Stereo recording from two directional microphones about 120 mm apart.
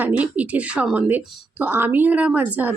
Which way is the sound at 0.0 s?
10° right (ahead or behind).